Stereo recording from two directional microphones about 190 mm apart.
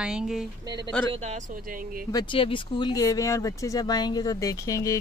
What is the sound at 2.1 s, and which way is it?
Speech, 25° left (ahead or behind).